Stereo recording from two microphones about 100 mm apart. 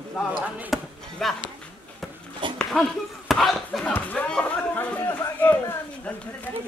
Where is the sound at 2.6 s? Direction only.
Centre (ahead or behind).